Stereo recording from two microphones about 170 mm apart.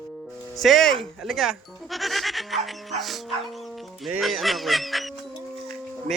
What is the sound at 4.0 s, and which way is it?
Speech, centre (ahead or behind).